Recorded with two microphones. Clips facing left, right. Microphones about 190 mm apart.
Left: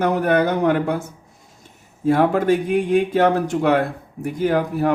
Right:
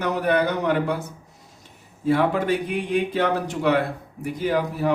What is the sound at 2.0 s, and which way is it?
Speech, 45° left (ahead or behind).